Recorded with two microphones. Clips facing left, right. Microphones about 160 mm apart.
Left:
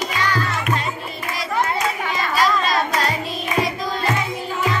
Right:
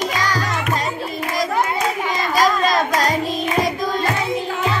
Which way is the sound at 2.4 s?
45° right (ahead or behind).